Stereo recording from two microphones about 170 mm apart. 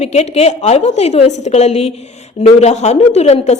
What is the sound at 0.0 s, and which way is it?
A woman's voice, 40° left (ahead or behind).